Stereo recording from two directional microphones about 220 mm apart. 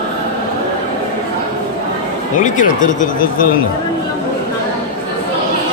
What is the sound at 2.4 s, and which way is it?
Speech, 35° left (ahead or behind).